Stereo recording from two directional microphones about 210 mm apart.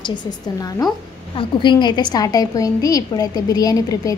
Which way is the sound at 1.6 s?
20° left (ahead or behind).